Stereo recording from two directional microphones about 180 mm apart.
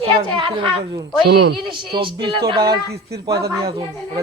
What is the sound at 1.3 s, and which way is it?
Speech, 65° right (ahead or behind).